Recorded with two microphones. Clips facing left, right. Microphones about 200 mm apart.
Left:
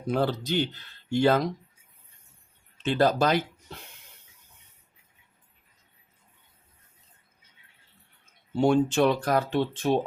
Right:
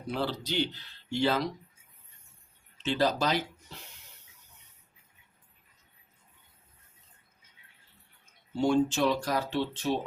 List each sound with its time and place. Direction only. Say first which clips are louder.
0.1 s speech: left 6 dB; 50° left (ahead or behind)
2.7 s speech: left 5 dB; 55° left (ahead or behind)
8.6 s speech: left 4 dB; 60° left (ahead or behind)